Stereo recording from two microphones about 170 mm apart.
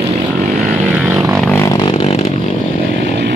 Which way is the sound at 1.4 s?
10° left (ahead or behind).